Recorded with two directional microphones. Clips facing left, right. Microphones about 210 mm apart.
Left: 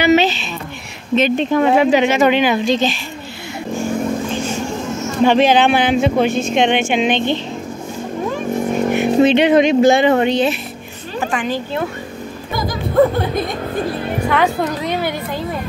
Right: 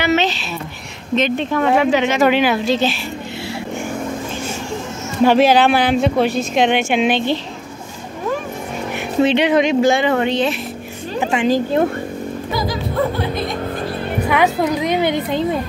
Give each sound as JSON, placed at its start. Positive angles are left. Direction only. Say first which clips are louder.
{"t": 0.0, "sound": "a sound", "louder": "left 4 dB", "side_deg": 15}
{"t": 1.1, "sound": "speech", "louder": "left 3 dB", "side_deg": 10}
{"t": 2.1, "sound": "speech", "louder": "left 1 dB", "side_deg": -5}
{"t": 5.2, "sound": "speech", "louder": "even", "side_deg": -5}
{"t": 9.3, "sound": "speech", "louder": "left 3 dB", "side_deg": 50}
{"t": 9.8, "sound": "speech", "louder": "left 3 dB", "side_deg": 20}
{"t": 11.1, "sound": "a woman's voice", "louder": "right 3 dB", "side_deg": -25}
{"t": 11.5, "sound": "speech", "louder": "right 6 dB", "side_deg": -40}
{"t": 14.3, "sound": "a woman's voice", "louder": "right 2 dB", "side_deg": -10}